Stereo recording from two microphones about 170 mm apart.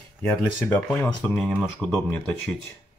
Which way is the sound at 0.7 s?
10° left (ahead or behind).